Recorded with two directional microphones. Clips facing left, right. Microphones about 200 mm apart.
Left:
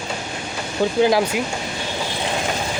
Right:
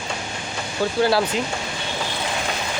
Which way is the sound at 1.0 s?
15° left (ahead or behind).